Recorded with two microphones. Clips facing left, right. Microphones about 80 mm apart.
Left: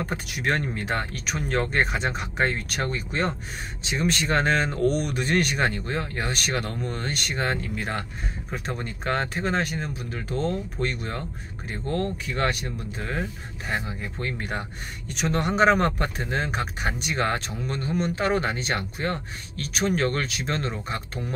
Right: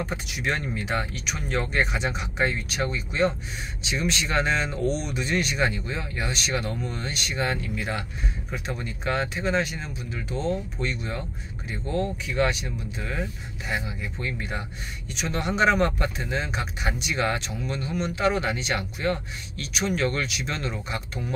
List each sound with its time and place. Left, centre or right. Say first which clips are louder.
0.0 s speech: left 1 dB; left